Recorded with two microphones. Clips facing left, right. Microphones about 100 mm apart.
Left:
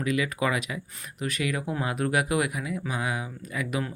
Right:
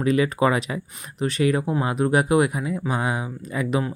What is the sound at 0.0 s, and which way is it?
Speech, 35° right (ahead or behind).